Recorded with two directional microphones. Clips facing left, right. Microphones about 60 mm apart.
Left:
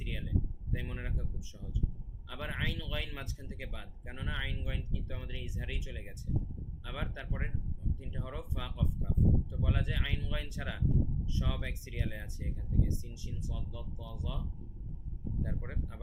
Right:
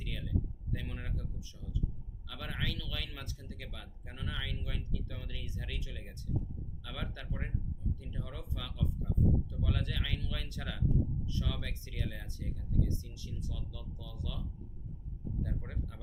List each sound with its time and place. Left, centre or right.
0.0 s speech: centre
15.6 s speech: left